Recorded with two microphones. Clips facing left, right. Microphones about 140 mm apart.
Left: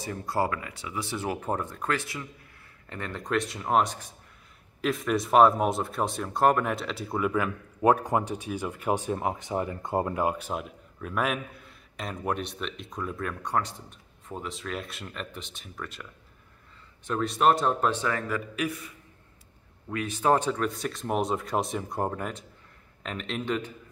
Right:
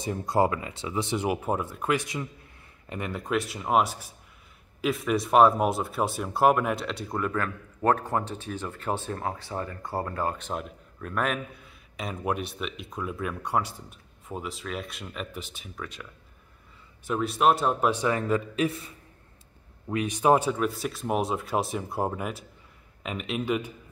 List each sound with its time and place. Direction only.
0.0 s a man's voice: 20° right (ahead or behind)
19.9 s a man's voice: 15° right (ahead or behind)